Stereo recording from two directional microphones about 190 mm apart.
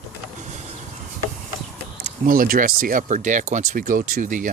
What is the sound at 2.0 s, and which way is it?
Speech, 45° right (ahead or behind).